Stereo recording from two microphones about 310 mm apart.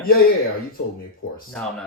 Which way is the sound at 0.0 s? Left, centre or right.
Left.